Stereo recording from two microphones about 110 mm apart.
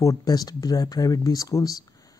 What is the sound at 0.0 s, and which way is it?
Speech, 30° left (ahead or behind).